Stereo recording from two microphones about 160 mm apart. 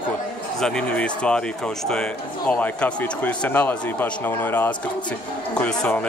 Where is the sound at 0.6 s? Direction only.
5° left (ahead or behind).